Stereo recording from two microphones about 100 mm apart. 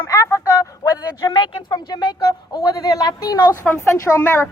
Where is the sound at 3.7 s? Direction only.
10° left (ahead or behind).